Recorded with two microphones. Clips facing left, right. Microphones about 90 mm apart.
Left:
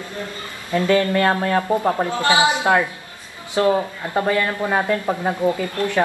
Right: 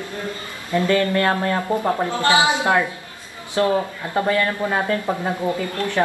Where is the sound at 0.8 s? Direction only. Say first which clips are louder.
Left 2 dB; 20° left (ahead or behind).